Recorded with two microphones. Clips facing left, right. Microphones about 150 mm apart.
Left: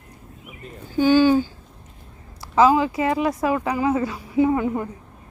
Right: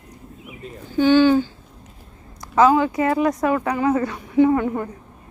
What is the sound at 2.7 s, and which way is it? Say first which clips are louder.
Speech: right 2 dB; 25° left (ahead or behind).